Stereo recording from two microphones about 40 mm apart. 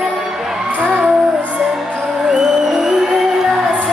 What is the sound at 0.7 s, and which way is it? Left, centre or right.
Music, right.